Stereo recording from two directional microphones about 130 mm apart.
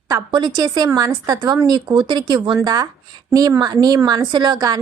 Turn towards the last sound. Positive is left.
turn(degrees=-30)  # may be behind; listen again after turning